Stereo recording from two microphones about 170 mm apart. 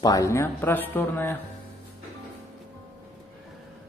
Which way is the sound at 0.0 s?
20° left (ahead or behind).